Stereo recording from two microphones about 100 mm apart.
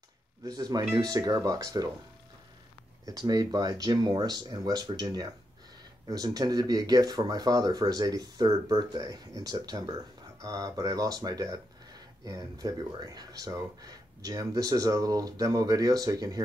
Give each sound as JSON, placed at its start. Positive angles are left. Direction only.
{"t": 0.5, "sound": "speech", "side_deg": -40}
{"t": 3.1, "sound": "speech", "side_deg": -40}